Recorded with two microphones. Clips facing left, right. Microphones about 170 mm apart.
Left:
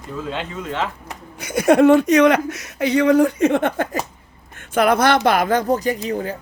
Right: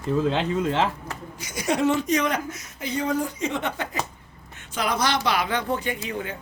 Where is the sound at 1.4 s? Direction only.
60° left (ahead or behind); by 6.3 s 35° left (ahead or behind).